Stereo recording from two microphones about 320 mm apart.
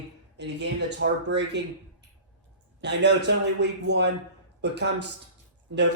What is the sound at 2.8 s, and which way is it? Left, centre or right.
Speech, right.